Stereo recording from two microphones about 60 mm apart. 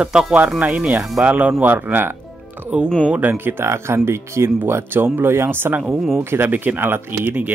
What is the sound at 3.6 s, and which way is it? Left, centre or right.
Speech, right.